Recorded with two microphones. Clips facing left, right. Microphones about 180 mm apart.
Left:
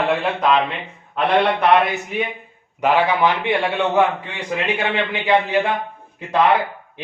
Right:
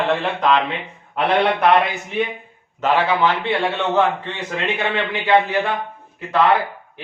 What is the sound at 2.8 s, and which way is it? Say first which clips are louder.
A man's voice: left 1 dB; 15° left (ahead or behind).